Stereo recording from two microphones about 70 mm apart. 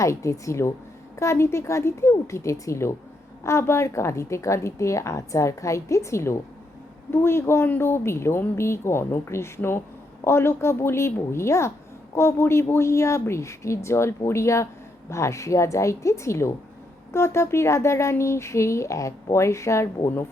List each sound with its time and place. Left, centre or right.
0.0 s speech: left